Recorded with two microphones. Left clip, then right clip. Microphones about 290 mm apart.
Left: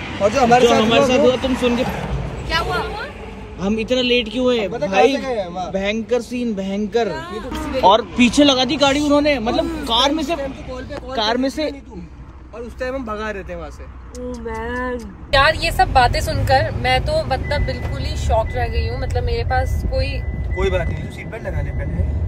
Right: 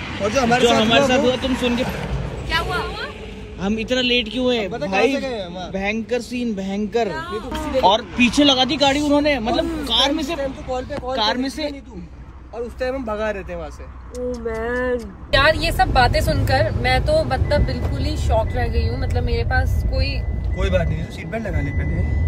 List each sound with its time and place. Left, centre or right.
0.1 s a man's voice: centre
20.5 s speech: left